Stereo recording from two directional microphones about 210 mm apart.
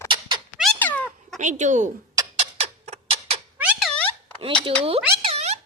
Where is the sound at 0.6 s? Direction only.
5° left (ahead or behind).